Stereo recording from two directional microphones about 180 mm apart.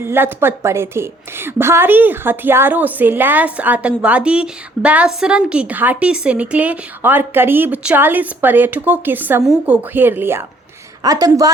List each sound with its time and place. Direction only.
0.0 s a woman's voice: 10° right (ahead or behind)